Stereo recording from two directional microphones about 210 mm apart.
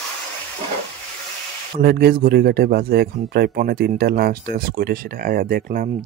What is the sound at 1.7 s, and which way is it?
Speech, 45° right (ahead or behind).